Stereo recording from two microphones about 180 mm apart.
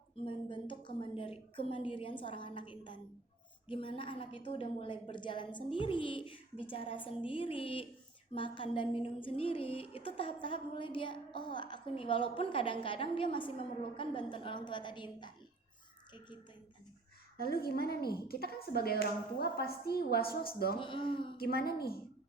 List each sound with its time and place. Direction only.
0.3 s a woman's voice: 30° left (ahead or behind)
17.3 s speech: 55° left (ahead or behind)
20.7 s a woman's voice: 30° left (ahead or behind)
21.3 s speech: 55° left (ahead or behind)